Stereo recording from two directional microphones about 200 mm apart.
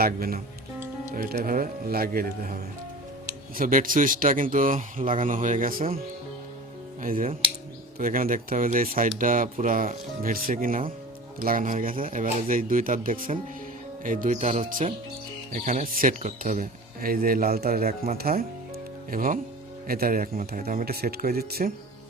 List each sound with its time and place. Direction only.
0.0 s speech: 50° right (ahead or behind)
7.0 s speech: 45° right (ahead or behind)